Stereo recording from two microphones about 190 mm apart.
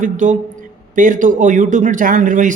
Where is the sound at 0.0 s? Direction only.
40° right (ahead or behind).